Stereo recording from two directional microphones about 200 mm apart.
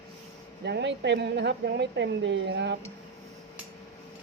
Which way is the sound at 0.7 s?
60° right (ahead or behind).